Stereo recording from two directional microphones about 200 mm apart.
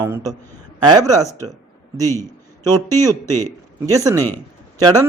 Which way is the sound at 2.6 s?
20° right (ahead or behind).